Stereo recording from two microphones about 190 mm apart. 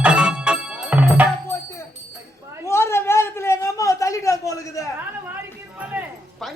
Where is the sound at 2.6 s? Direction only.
15° left (ahead or behind).